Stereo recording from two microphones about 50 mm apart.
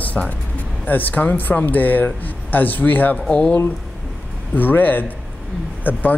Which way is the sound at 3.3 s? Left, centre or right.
Left.